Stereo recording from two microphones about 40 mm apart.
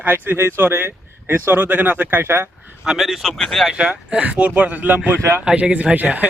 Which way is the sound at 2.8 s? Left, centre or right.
Centre.